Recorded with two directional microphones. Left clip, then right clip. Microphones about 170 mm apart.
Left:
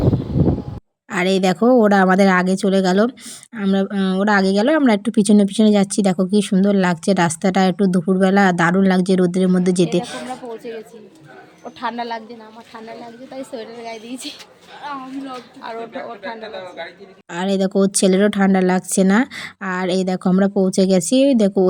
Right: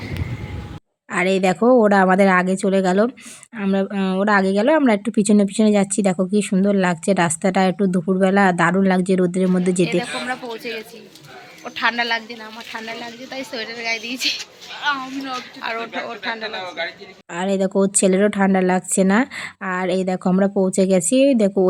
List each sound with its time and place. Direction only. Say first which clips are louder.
1.1 s speech: even; 25° left (ahead or behind)
13.3 s speech: right 2 dB; 20° left (ahead or behind)
15.2 s speech: right 4 dB; 5° left (ahead or behind)
16.6 s speech: right 4 dB; 25° left (ahead or behind)